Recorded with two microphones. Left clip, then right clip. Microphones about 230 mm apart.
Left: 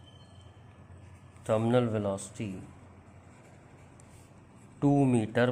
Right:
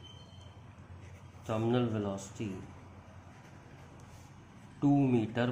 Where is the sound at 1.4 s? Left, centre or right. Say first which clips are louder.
Left 6 dB; left.